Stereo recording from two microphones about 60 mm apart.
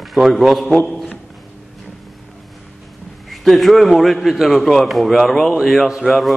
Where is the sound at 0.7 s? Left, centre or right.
Left.